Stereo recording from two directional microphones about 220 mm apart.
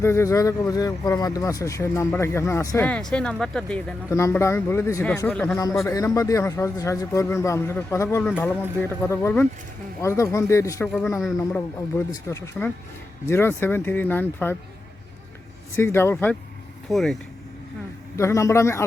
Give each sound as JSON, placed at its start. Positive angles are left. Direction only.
{"t": 0.0, "sound": "speech", "side_deg": 10}
{"t": 15.7, "sound": "speech", "side_deg": 10}
{"t": 18.2, "sound": "speech", "side_deg": 15}